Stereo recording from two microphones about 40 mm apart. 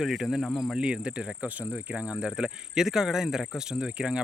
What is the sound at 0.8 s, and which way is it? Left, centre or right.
Speech, right.